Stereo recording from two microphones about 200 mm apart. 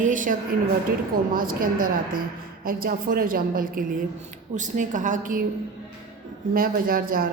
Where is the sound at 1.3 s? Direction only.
45° right (ahead or behind).